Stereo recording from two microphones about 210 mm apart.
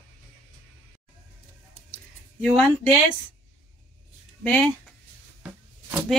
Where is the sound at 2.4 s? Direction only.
5° left (ahead or behind).